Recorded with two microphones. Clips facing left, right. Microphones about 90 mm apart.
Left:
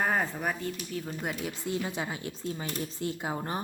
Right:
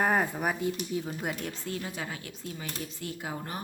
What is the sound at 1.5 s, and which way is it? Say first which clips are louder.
Speech: left 4 dB; 20° left (ahead or behind).